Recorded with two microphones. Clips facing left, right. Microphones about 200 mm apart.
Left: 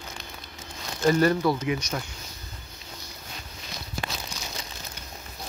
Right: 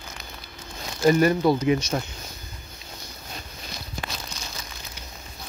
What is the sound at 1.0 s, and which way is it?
Speech, 15° right (ahead or behind).